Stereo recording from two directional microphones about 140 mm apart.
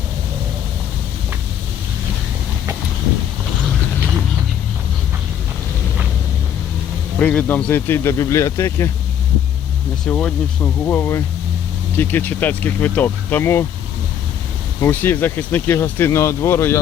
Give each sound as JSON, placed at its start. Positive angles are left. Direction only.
{"t": 7.2, "sound": "speech", "side_deg": 10}
{"t": 10.1, "sound": "speech", "side_deg": 10}
{"t": 14.8, "sound": "speech", "side_deg": 15}